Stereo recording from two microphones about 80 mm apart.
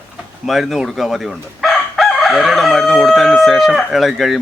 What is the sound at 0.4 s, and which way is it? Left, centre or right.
Speech, centre.